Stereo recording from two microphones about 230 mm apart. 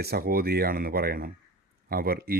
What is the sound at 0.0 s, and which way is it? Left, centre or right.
Speech, right.